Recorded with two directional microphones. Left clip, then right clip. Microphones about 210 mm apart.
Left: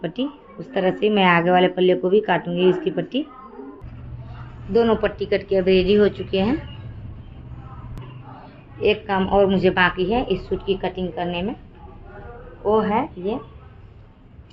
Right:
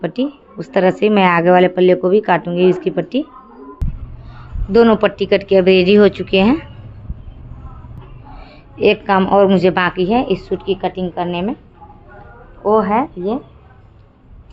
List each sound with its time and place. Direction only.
0.0 s speech: 30° right (ahead or behind)
0.6 s speech: 45° right (ahead or behind)
4.7 s a woman's voice: 50° right (ahead or behind)
8.8 s a woman's voice: 55° right (ahead or behind)
12.6 s a woman's voice: 50° right (ahead or behind)